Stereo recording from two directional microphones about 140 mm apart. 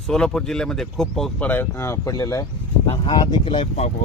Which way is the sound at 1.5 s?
15° left (ahead or behind).